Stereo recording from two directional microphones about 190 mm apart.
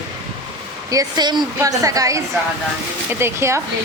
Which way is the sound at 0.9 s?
20° right (ahead or behind).